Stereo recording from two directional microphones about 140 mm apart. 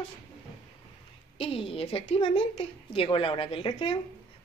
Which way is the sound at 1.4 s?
40° left (ahead or behind).